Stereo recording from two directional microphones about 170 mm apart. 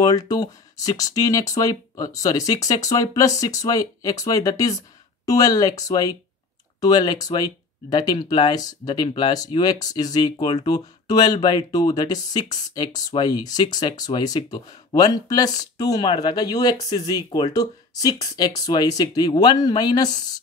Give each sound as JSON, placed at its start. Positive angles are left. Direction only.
{"t": 0.0, "sound": "speech", "side_deg": 25}